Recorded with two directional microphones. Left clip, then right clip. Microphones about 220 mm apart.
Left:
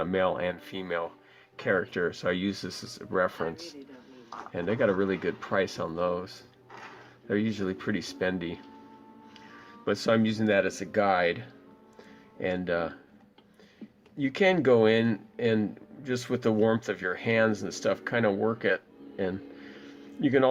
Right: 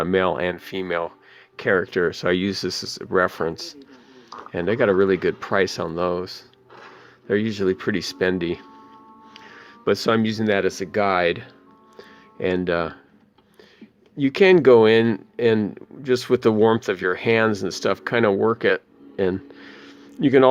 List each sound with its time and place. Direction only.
0.0 s speech: 40° right (ahead or behind)
11.9 s music: 40° right (ahead or behind)
14.2 s speech: 45° right (ahead or behind)